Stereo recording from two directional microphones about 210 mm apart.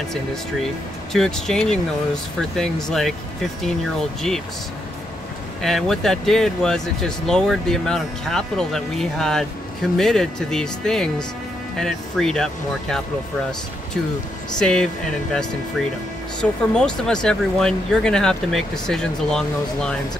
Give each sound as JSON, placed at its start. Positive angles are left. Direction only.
{"t": 1.1, "sound": "speech", "side_deg": 0}
{"t": 5.6, "sound": "speech", "side_deg": 0}
{"t": 14.6, "sound": "speech", "side_deg": 5}
{"t": 16.3, "sound": "speech", "side_deg": 5}